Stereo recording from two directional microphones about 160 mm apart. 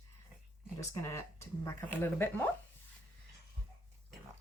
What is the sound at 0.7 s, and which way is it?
Speech, 15° left (ahead or behind).